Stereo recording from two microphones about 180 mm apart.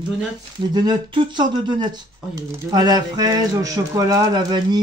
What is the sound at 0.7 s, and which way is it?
Speech, 25° right (ahead or behind).